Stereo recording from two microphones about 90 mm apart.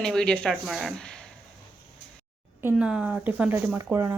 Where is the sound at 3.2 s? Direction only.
20° right (ahead or behind).